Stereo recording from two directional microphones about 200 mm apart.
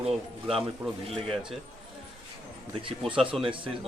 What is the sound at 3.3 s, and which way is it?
Speech, 25° right (ahead or behind).